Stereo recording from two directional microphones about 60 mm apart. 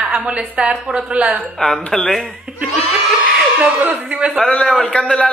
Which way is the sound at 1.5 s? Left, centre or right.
Centre.